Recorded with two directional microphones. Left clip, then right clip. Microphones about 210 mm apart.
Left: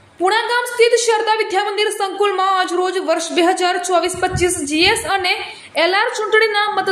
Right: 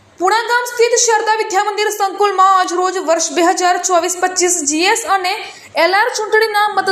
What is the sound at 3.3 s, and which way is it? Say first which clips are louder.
A woman's voice: right 1 dB; centre (ahead or behind).